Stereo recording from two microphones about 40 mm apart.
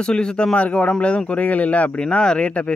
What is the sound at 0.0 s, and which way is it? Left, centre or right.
Speech, left.